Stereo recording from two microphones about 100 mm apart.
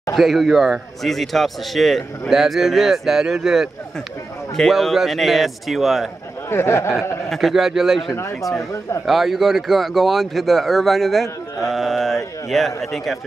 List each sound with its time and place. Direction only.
0.1 s speech: centre (ahead or behind)
6.5 s speech: 25° left (ahead or behind)
7.2 s speech: centre (ahead or behind)